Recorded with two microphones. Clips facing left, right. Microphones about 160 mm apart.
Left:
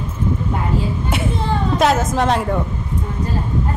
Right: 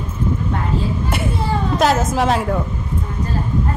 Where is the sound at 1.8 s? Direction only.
Centre (ahead or behind).